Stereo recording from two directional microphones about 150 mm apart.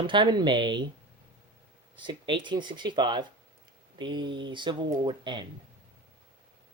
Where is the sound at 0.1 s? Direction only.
30° right (ahead or behind).